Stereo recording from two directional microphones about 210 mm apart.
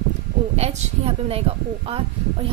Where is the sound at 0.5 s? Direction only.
30° right (ahead or behind).